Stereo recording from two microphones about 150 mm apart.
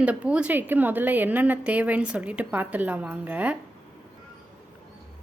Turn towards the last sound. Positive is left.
turn(degrees=-10)  # may be behind; listen again after turning